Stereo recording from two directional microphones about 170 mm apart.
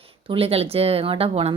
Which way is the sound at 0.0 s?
35° right (ahead or behind).